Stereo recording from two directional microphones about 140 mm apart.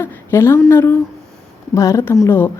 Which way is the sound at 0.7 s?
15° left (ahead or behind).